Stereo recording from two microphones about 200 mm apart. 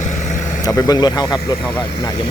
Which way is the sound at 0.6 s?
20° left (ahead or behind).